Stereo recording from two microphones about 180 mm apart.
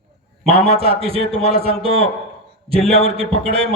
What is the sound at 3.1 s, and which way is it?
Speech, 35° right (ahead or behind).